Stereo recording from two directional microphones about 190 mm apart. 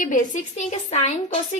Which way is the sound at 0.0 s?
45° left (ahead or behind).